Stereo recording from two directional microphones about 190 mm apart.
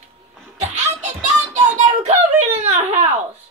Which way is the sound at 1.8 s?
40° right (ahead or behind).